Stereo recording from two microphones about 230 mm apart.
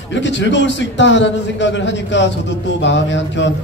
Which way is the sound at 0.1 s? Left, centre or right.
Left.